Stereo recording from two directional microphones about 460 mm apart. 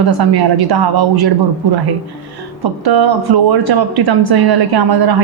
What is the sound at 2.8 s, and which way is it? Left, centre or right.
Speech, right.